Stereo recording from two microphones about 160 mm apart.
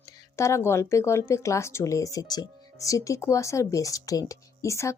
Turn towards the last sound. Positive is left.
turn(degrees=20)  # may be behind; listen again after turning